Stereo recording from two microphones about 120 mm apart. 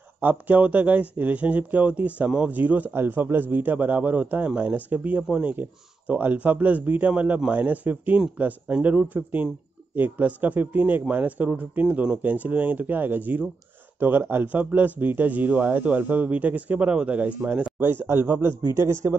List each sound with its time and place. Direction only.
0.2 s a man's voice: 15° right (ahead or behind)